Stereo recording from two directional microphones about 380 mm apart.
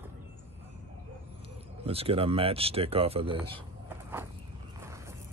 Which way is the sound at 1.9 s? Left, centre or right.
Centre.